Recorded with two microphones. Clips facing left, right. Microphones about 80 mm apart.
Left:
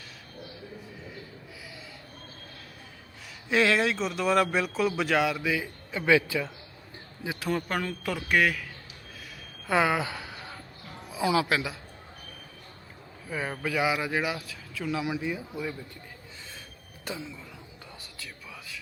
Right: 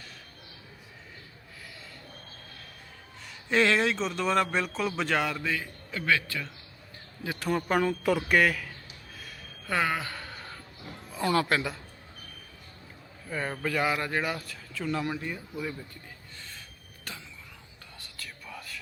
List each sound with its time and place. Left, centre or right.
3.5 s speech: centre
7.3 s speech: centre
9.6 s a sound: centre
11.1 s speech: centre
13.2 s speech: centre
18.2 s whispering: centre